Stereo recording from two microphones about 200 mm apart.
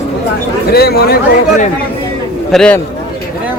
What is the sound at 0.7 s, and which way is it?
Speech, 50° left (ahead or behind).